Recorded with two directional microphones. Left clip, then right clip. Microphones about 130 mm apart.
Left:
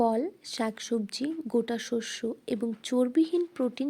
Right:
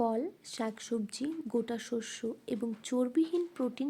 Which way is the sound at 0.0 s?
45° left (ahead or behind).